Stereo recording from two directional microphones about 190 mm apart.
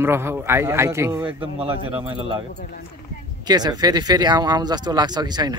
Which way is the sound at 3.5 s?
20° right (ahead or behind).